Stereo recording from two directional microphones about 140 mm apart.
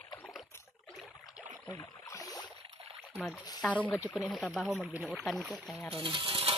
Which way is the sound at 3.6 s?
10° left (ahead or behind).